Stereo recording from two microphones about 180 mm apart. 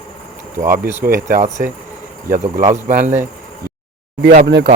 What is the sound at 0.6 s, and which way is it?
Speech, 50° right (ahead or behind).